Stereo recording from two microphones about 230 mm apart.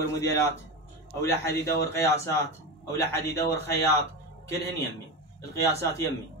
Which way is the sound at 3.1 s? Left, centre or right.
Centre.